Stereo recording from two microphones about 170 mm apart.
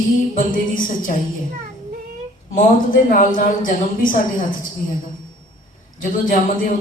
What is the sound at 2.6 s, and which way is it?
Speech, 50° left (ahead or behind).